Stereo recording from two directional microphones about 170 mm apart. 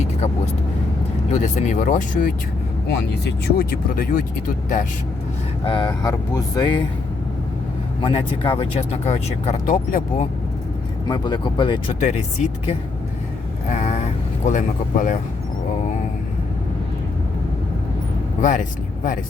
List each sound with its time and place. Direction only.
1.3 s speech: 45° left (ahead or behind)
3.2 s speech: 70° left (ahead or behind)
5.6 s speech: 30° left (ahead or behind)
8.0 s speech: 30° left (ahead or behind)
11.1 s speech: 25° left (ahead or behind)
11.9 s speech: 45° left (ahead or behind)
13.7 s vehicle: 45° left (ahead or behind)
18.4 s speech: 50° left (ahead or behind)